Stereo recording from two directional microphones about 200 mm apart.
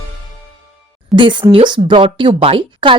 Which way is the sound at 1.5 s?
25° right (ahead or behind).